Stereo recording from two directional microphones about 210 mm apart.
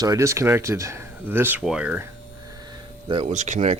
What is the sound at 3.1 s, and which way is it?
Speech, 30° right (ahead or behind).